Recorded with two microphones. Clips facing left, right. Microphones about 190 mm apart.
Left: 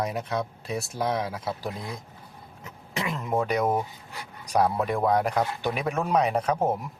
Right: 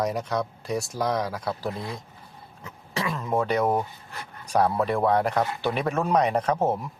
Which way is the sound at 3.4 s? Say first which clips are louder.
Right 2 dB; 15° left (ahead or behind).